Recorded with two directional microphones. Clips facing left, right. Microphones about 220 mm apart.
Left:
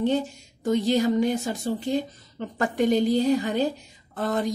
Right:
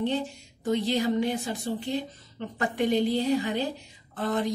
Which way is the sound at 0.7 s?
45° left (ahead or behind).